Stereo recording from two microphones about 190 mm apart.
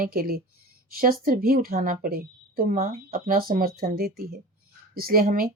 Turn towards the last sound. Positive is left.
turn(degrees=-50)  # may be behind; listen again after turning